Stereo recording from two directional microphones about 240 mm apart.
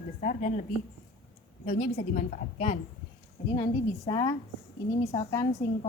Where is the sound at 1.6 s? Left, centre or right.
Left.